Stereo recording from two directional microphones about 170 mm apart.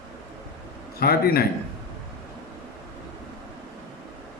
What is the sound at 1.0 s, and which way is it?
Speech, 65° left (ahead or behind).